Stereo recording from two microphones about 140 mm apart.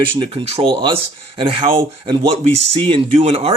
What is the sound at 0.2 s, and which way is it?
Speech, 45° right (ahead or behind).